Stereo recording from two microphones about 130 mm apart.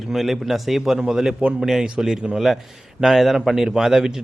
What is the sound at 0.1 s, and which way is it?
A man's voice, centre (ahead or behind).